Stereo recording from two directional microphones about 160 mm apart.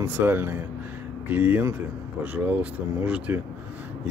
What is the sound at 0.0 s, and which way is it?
Speech, 15° right (ahead or behind).